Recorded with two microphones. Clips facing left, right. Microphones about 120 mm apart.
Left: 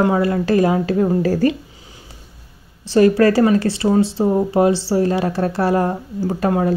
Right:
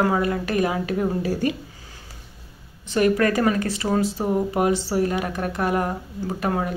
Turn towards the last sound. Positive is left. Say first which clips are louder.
# left 7 dB
turn(degrees=35)  # may be behind; listen again after turning